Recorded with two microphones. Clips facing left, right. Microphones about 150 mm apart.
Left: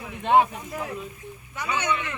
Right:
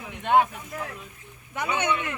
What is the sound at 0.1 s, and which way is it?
Speech, centre (ahead or behind).